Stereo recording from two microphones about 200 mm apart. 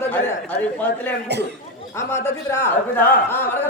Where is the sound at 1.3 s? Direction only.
55° right (ahead or behind).